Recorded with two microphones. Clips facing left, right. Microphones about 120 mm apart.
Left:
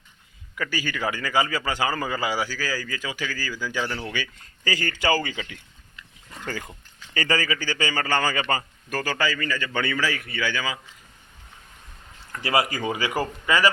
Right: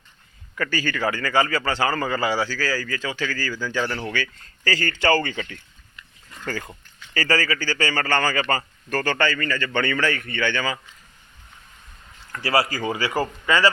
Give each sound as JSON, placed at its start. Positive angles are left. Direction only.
{"t": 0.5, "sound": "a man's voice", "side_deg": 10}
{"t": 12.3, "sound": "speech", "side_deg": 20}